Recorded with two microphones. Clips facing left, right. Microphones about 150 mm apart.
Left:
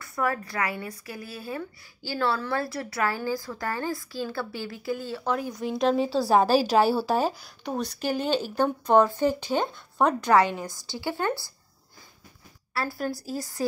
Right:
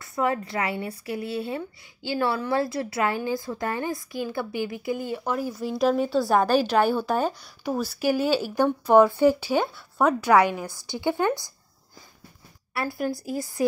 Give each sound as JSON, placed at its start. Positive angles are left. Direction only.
{"t": 0.0, "sound": "a woman's voice", "side_deg": -20}
{"t": 6.4, "sound": "a woman's voice", "side_deg": 30}
{"t": 7.0, "sound": "speech", "side_deg": 0}
{"t": 12.7, "sound": "speech", "side_deg": -15}